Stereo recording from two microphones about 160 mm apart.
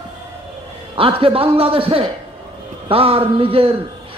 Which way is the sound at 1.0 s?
35° right (ahead or behind).